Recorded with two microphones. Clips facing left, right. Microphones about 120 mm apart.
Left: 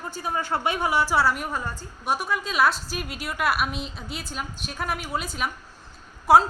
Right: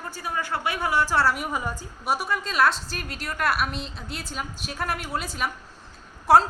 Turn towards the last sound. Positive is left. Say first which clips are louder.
# left 1 dB
turn(degrees=0)  # may be behind; listen again after turning